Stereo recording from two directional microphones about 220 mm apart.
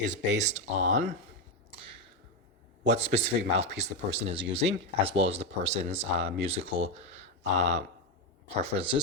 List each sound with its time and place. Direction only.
0.0 s speech: 35° right (ahead or behind)
3.0 s speech: 30° right (ahead or behind)